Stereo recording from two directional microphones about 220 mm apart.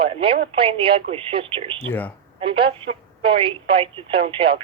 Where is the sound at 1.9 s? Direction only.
5° left (ahead or behind).